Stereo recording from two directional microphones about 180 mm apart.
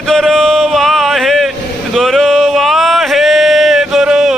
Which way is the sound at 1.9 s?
Centre (ahead or behind).